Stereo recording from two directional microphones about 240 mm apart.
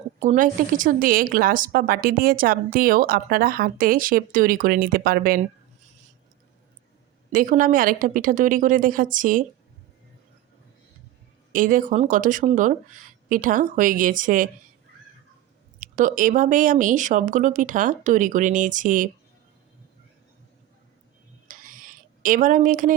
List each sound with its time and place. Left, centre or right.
0.2 s a woman's voice: right
7.3 s a woman's voice: right
11.5 s a woman's voice: right
15.8 s a woman's voice: right
21.4 s a sound: right